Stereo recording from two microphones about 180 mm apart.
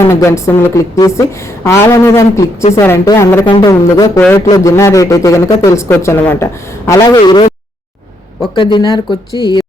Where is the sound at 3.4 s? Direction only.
25° left (ahead or behind).